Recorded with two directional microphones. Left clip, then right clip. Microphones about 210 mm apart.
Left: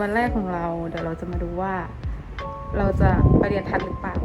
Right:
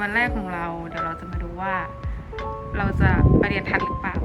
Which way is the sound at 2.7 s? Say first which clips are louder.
Left 2 dB; 25° left (ahead or behind).